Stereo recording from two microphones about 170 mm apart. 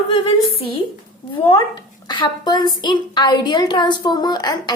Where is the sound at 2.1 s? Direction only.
25° left (ahead or behind).